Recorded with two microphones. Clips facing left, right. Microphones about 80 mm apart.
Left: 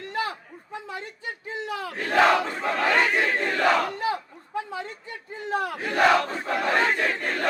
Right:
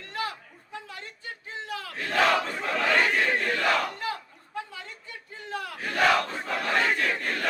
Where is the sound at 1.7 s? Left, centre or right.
Left.